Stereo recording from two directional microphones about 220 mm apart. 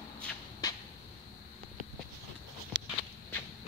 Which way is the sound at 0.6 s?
15° left (ahead or behind).